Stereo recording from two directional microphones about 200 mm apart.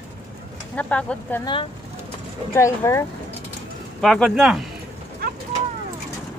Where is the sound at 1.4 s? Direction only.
25° left (ahead or behind).